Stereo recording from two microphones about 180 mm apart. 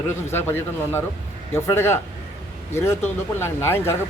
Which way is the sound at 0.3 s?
10° left (ahead or behind).